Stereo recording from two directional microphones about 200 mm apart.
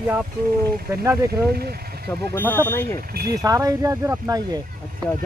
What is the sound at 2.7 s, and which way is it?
Speech, 10° left (ahead or behind).